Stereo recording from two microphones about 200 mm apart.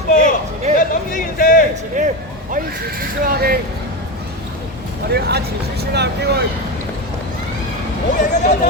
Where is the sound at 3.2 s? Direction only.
50° right (ahead or behind).